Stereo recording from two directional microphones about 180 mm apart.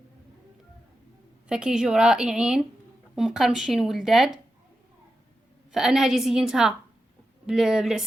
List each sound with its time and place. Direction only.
1.5 s a woman's voice: 5° right (ahead or behind)
5.7 s a woman's voice: centre (ahead or behind)